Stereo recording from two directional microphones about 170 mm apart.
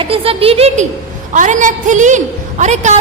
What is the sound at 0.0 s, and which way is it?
Speech, 35° right (ahead or behind).